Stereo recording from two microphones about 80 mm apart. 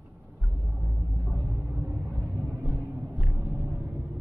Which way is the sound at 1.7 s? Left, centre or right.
Right.